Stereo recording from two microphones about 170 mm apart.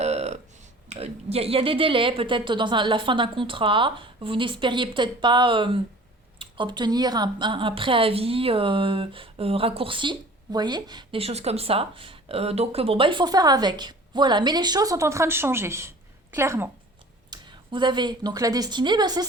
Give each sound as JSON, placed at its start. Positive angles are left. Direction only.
{"t": 0.0, "sound": "a sound", "side_deg": -40}
{"t": 0.9, "sound": "a woman's voice", "side_deg": -40}
{"t": 17.3, "sound": "a woman's voice", "side_deg": -25}